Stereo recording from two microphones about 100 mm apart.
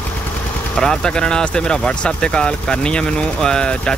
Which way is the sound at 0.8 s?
5° left (ahead or behind).